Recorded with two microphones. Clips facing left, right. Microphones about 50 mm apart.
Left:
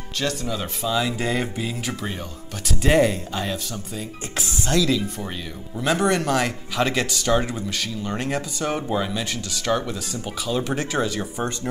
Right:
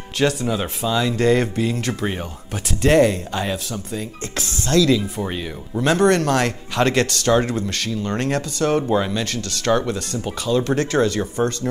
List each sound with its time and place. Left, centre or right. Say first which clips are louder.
0.5 s speech: right 4 dB; right
0.9 s speech: right 7 dB; centre
2.0 s speech: right 6 dB; right
2.8 s speech: right 3 dB; centre
3.3 s speech: right 3 dB; centre
4.4 s speech: right 4 dB; centre
4.9 s speech: right 4 dB; centre
5.9 s speech: right 4 dB; centre
8.8 s speech: right 5 dB; centre
9.1 s speech: right 3 dB; centre
11.4 s speech: right 7 dB; centre